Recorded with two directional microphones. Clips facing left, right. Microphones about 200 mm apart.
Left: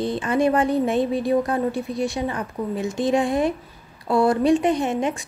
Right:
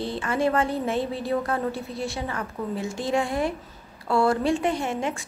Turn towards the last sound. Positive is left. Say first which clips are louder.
# left 5 dB
turn(degrees=20)  # may be behind; listen again after turning